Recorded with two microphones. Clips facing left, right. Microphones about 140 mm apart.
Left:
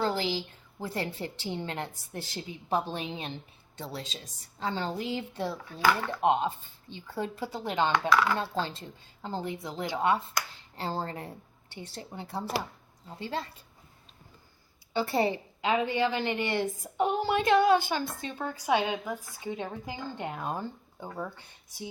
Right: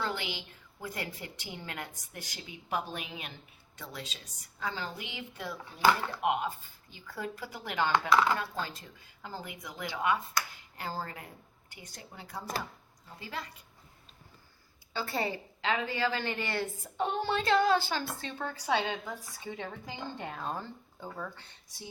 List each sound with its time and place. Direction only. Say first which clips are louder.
0.0 s a woman's voice: left 7 dB; 35° left (ahead or behind)
14.9 s a woman's voice: left 6 dB; 25° left (ahead or behind)